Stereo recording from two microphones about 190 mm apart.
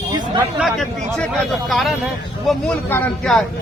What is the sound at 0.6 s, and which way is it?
Speech, centre (ahead or behind).